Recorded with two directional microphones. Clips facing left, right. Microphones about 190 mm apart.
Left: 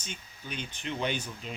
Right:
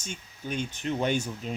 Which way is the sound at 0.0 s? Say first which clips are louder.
Right 5 dB; 45° right (ahead or behind).